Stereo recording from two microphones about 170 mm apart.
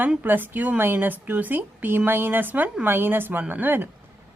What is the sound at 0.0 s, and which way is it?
Speech, 10° right (ahead or behind).